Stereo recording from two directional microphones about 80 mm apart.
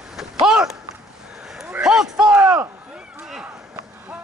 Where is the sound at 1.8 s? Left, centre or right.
Centre.